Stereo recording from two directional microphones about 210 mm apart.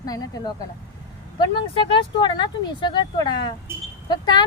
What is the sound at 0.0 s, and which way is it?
A woman's voice, 20° left (ahead or behind).